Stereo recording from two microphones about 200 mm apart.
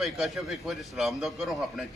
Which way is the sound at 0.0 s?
Centre (ahead or behind).